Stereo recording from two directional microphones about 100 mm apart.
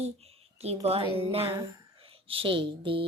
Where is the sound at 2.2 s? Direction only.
60° right (ahead or behind).